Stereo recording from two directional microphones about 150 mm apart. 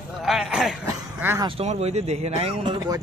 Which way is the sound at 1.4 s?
45° right (ahead or behind).